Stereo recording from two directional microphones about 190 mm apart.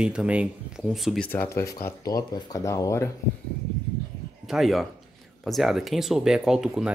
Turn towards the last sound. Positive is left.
turn(degrees=0)  # may be behind; listen again after turning